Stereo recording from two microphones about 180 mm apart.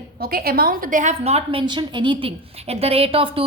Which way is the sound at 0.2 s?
55° right (ahead or behind).